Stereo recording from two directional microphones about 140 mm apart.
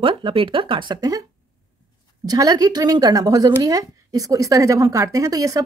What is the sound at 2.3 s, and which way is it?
Speech, 25° right (ahead or behind).